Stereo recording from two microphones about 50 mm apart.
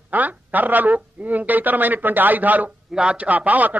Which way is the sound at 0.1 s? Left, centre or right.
Right.